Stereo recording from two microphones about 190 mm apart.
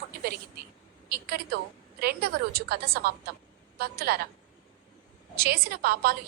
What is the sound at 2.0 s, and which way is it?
A woman's voice, 55° right (ahead or behind).